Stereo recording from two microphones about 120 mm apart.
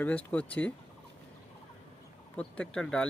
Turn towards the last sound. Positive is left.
turn(degrees=5)  # may be behind; listen again after turning